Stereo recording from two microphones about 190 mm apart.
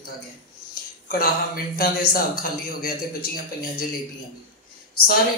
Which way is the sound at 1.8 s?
50° left (ahead or behind).